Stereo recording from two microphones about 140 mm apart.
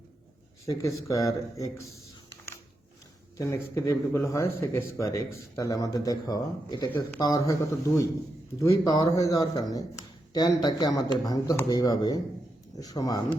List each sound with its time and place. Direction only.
0.6 s speech: 20° left (ahead or behind)
3.3 s speech: 20° left (ahead or behind)